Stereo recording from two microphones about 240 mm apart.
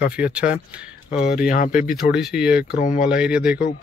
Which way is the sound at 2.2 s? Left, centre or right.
Centre.